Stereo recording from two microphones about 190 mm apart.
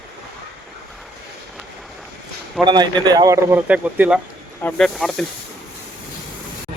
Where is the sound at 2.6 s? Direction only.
25° right (ahead or behind); by 4.2 s 5° right (ahead or behind).